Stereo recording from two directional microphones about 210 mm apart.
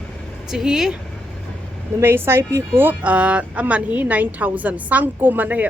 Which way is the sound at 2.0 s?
10° right (ahead or behind).